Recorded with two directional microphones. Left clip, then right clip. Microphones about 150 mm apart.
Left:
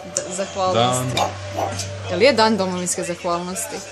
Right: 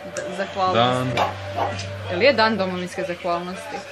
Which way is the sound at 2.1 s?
50° left (ahead or behind).